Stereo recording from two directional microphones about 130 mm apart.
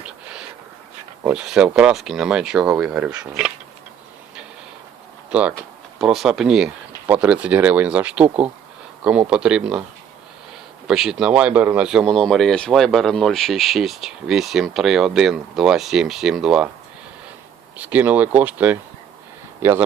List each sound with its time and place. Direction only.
1.2 s speech: 5° right (ahead or behind)
5.3 s speech: 10° right (ahead or behind)
10.8 s speech: centre (ahead or behind)
17.7 s speech: 10° right (ahead or behind)